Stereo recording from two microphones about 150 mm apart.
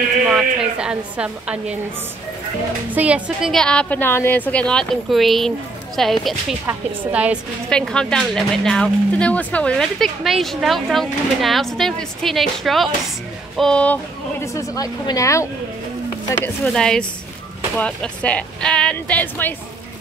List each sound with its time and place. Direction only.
0.2 s a woman's voice: 5° right (ahead or behind)
2.9 s a woman's voice: 10° right (ahead or behind)
7.7 s speech: 5° left (ahead or behind)
14.4 s speech: 20° left (ahead or behind)
16.6 s speech: 5° left (ahead or behind)